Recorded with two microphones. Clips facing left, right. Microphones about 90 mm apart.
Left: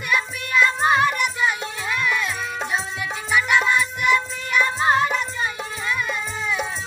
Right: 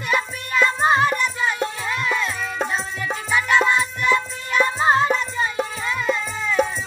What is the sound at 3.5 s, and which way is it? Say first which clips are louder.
Music: right 1 dB; 30° right (ahead or behind).